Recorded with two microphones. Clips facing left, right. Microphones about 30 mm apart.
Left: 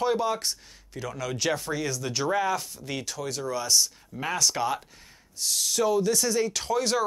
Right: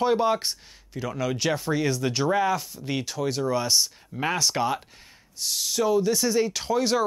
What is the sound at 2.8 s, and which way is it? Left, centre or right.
Speech, centre.